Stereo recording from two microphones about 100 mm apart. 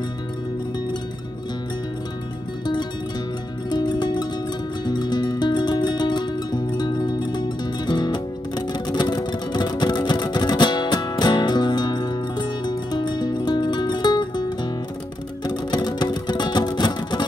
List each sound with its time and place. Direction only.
3.7 s music: 45° left (ahead or behind)